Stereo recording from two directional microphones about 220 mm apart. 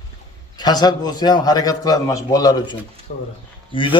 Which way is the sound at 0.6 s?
20° left (ahead or behind).